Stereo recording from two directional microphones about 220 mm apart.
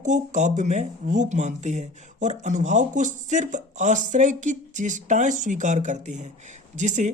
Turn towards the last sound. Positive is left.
turn(degrees=-30)  # may be behind; listen again after turning